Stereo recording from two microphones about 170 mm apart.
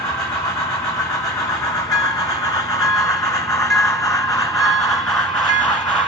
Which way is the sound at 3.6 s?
20° left (ahead or behind).